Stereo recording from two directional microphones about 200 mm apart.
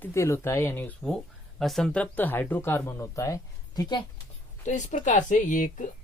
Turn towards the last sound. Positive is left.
turn(degrees=40)  # may be behind; listen again after turning